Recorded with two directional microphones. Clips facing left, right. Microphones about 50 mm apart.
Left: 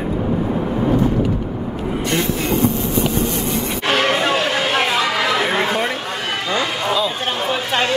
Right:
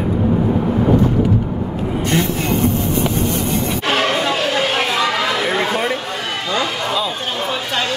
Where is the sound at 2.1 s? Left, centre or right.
Right.